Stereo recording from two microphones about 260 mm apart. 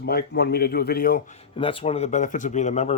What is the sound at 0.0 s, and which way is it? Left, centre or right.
A man's voice, left.